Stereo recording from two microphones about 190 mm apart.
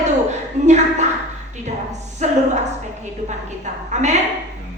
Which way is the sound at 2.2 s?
40° right (ahead or behind).